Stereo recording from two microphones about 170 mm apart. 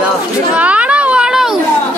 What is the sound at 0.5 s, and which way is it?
Children playing, 10° right (ahead or behind).